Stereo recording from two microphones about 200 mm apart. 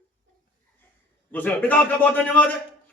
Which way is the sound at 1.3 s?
10° left (ahead or behind).